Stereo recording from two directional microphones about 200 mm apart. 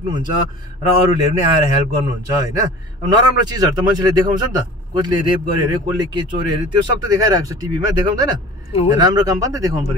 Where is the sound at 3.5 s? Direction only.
20° right (ahead or behind).